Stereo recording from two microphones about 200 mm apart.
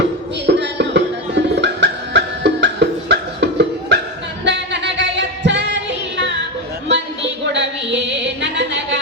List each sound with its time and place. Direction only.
0.4 s music: 60° right (ahead or behind)
7.5 s music: 60° right (ahead or behind)